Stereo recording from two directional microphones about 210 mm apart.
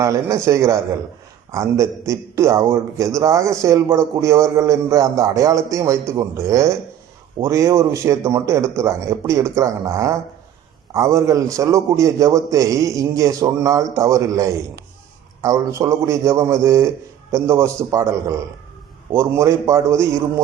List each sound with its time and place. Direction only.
0.0 s a man's voice: 15° right (ahead or behind)